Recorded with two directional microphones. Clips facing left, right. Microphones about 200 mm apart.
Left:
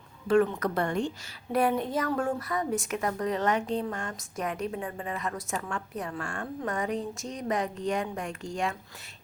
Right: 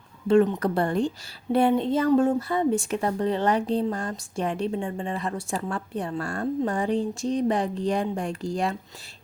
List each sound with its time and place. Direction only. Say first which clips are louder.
0.3 s speech: right 4 dB; 20° right (ahead or behind)